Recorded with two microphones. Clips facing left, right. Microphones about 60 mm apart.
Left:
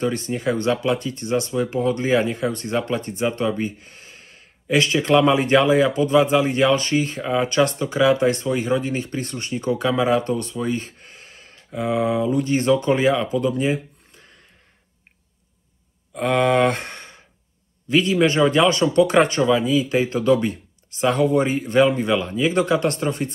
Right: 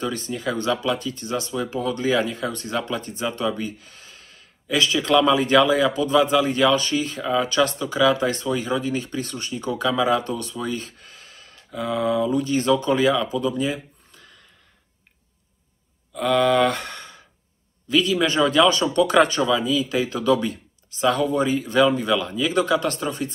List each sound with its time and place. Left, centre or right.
0.3 s speech: left
16.1 s speech: left